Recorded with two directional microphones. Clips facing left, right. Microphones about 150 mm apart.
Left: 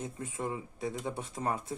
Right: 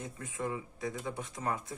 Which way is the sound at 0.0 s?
25° left (ahead or behind).